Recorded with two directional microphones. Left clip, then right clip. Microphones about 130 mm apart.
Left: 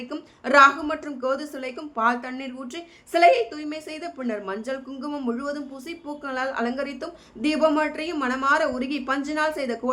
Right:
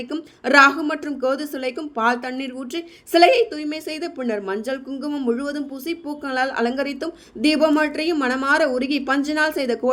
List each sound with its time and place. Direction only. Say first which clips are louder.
0.1 s a woman's voice: right 3 dB; 35° right (ahead or behind)